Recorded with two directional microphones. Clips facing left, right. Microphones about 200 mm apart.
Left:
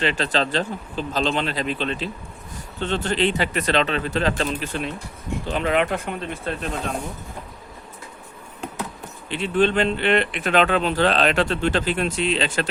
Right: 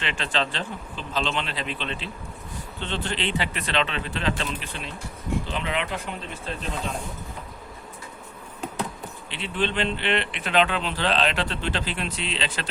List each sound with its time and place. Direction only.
0.0 s speech: 40° left (ahead or behind); by 6.7 s 55° left (ahead or behind)
9.3 s speech: 45° left (ahead or behind)